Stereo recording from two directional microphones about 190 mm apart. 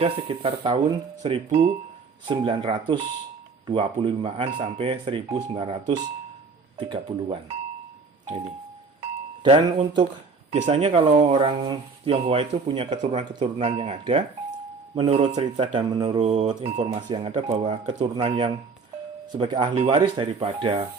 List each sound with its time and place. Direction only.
0.0 s speech: 30° right (ahead or behind)
1.5 s speech: 35° right (ahead or behind)
2.2 s speech: 25° right (ahead or behind)
9.0 s doorbell: 30° right (ahead or behind)
10.5 s speech: 35° right (ahead or behind)